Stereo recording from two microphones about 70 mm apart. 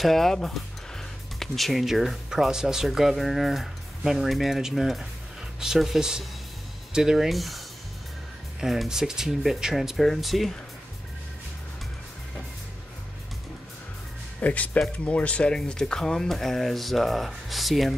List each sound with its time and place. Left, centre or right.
0.0 s speech: centre
14.4 s speech: left; by 17.9 s centre